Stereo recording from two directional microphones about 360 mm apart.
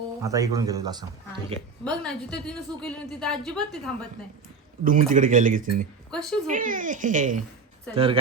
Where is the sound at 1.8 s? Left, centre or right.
Centre.